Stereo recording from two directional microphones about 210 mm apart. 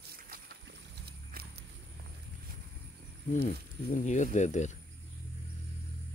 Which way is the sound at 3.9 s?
35° left (ahead or behind).